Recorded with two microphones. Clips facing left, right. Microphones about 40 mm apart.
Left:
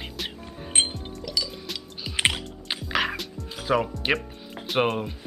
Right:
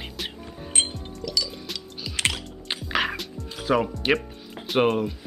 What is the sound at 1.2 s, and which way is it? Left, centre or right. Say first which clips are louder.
Music: right 2 dB; centre.